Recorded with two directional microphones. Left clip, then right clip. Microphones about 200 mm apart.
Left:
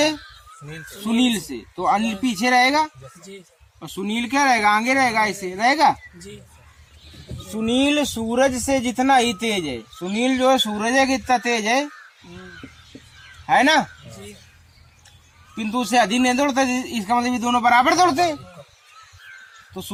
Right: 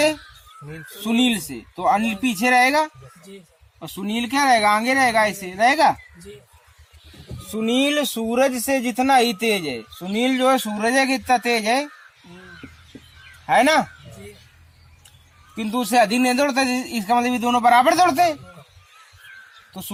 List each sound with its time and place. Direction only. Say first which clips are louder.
1.0 s speech: right 1 dB; 25° right (ahead or behind)
3.8 s speech: left 1 dB; 25° right (ahead or behind)
7.5 s speech: even; 35° right (ahead or behind); by 9.2 s 20° right (ahead or behind)
9.2 s speech: right 2 dB; 30° right (ahead or behind)
13.5 s speech: even; 30° right (ahead or behind)
15.5 s speech: right 1 dB; 20° right (ahead or behind)